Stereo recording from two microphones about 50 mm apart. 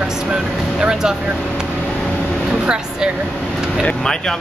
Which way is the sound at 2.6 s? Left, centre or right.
Centre.